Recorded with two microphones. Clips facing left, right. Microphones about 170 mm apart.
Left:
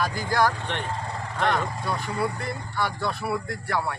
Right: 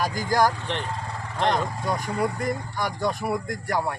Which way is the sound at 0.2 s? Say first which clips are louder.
Right 3 dB; 40° right (ahead or behind).